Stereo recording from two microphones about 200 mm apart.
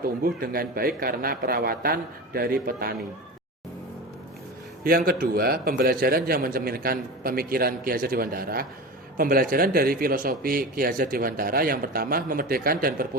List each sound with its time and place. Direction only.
0.3 s a man's voice: 50° right (ahead or behind)
4.8 s a man's voice: 45° right (ahead or behind)